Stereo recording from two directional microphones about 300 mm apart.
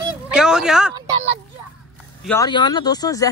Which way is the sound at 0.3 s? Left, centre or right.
Centre.